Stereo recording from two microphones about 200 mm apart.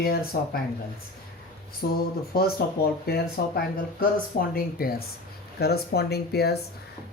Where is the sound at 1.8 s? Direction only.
50° left (ahead or behind).